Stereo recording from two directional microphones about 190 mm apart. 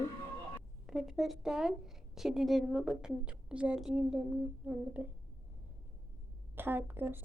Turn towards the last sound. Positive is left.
turn(degrees=-10)  # may be behind; listen again after turning